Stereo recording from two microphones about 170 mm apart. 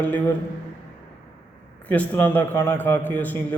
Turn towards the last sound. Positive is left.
turn(degrees=10)  # may be behind; listen again after turning